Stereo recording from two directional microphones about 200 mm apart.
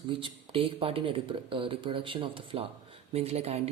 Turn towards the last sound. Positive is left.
turn(degrees=-30)  # may be behind; listen again after turning